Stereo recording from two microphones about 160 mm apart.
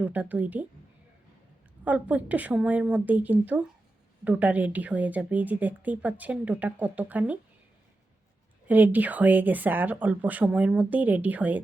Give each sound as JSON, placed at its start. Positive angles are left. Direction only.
{"t": 0.0, "sound": "speech", "side_deg": -10}
{"t": 1.8, "sound": "speech", "side_deg": -10}
{"t": 8.6, "sound": "speech", "side_deg": -10}